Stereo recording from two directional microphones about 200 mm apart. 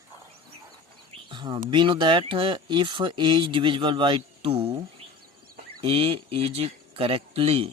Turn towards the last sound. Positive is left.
turn(degrees=-30)  # may be behind; listen again after turning